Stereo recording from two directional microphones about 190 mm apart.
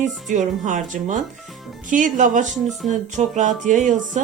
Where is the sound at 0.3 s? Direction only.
40° right (ahead or behind).